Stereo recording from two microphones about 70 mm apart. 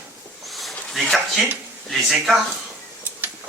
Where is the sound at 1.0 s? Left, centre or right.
Centre.